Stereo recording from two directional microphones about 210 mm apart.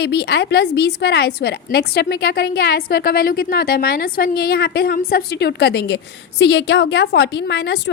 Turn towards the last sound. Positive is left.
turn(degrees=55)  # may be behind; listen again after turning